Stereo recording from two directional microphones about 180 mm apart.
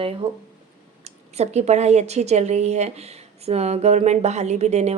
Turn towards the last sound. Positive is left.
turn(degrees=-35)  # may be behind; listen again after turning